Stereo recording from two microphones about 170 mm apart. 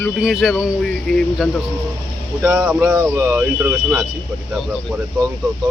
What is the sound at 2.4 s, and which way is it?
Speech, 10° right (ahead or behind).